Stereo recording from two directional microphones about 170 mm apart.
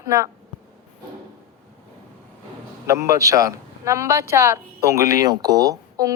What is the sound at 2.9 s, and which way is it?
A man's voice, 20° right (ahead or behind).